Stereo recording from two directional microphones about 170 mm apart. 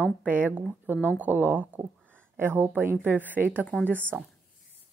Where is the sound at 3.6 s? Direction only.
10° left (ahead or behind).